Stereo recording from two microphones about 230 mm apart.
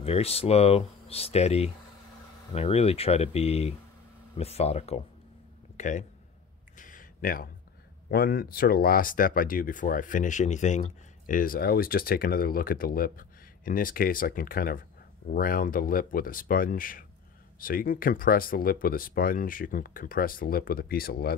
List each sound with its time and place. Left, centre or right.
0.0 s speech: left
6.8 s a sound: left
8.1 s speech: left